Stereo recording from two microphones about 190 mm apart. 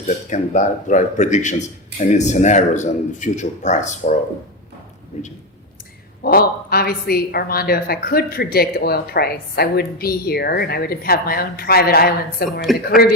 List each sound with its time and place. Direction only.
0.3 s a man's voice: 40° left (ahead or behind)
6.2 s a woman's voice: 50° left (ahead or behind)
12.7 s speech: centre (ahead or behind)